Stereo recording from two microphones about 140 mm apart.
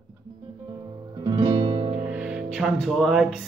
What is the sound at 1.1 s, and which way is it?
Music, 30° right (ahead or behind).